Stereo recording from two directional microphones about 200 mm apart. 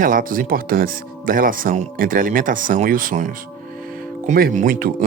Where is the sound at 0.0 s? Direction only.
45° right (ahead or behind).